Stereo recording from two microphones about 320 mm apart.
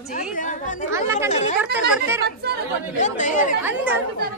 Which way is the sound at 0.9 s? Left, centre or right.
Centre.